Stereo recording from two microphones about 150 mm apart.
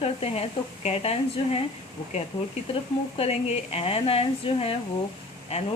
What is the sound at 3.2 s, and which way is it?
Speech, 45° left (ahead or behind).